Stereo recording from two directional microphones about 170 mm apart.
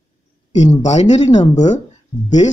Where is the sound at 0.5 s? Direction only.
40° left (ahead or behind).